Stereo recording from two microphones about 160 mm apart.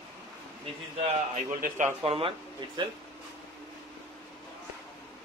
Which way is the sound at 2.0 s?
35° right (ahead or behind).